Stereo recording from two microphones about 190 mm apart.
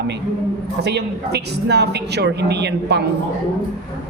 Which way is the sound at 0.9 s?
60° right (ahead or behind).